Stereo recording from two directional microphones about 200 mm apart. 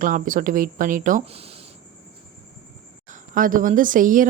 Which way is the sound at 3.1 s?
40° right (ahead or behind).